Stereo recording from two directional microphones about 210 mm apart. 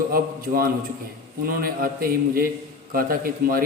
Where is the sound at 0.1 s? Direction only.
45° right (ahead or behind).